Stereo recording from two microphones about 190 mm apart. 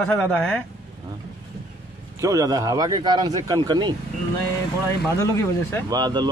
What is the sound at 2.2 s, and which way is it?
Speech, 20° right (ahead or behind).